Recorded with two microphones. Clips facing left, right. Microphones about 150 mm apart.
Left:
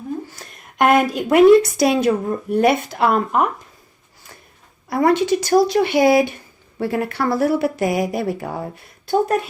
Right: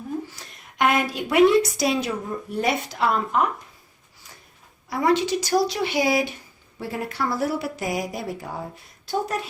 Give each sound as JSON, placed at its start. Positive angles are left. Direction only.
{"t": 0.3, "sound": "a sound", "side_deg": 50}
{"t": 1.5, "sound": "speech", "side_deg": 55}
{"t": 4.9, "sound": "speech", "side_deg": 55}